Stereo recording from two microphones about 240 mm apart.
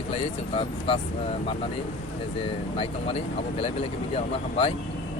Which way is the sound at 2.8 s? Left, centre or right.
Left.